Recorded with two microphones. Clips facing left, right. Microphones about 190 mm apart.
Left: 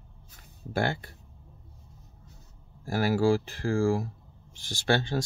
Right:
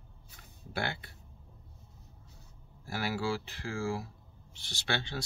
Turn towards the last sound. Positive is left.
turn(degrees=45)  # may be behind; listen again after turning